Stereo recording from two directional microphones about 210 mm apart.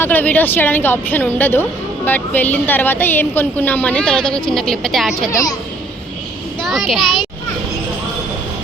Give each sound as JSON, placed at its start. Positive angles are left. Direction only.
{"t": 0.0, "sound": "a woman's voice", "side_deg": 10}
{"t": 6.6, "sound": "a child's voice", "side_deg": 0}